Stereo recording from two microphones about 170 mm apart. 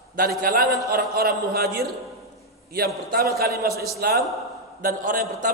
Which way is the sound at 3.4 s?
65° right (ahead or behind).